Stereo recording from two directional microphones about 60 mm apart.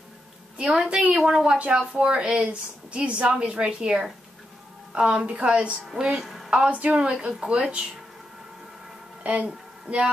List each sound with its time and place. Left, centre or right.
0.6 s a woman's voice: centre
6.5 s speech: centre
9.2 s speech: right